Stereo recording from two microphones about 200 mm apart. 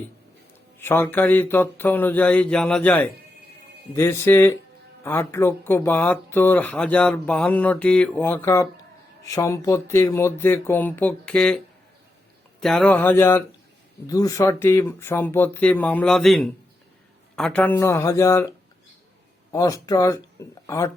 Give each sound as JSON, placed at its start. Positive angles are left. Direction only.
{"t": 0.8, "sound": "speech", "side_deg": 10}
{"t": 19.5, "sound": "speech", "side_deg": 15}